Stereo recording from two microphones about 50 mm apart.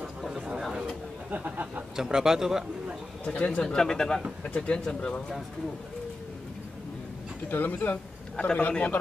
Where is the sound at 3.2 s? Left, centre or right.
Left.